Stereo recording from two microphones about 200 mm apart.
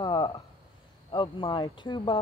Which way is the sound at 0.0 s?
25° left (ahead or behind).